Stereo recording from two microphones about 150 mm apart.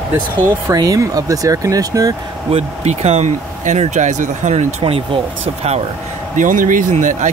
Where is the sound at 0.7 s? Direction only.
25° right (ahead or behind).